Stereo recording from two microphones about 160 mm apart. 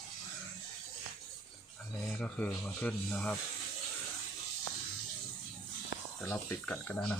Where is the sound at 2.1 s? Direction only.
5° left (ahead or behind).